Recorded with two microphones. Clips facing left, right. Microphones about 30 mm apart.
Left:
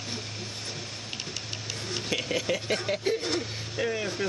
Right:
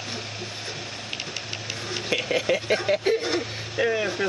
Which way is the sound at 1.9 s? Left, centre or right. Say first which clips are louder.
Right 5 dB; right.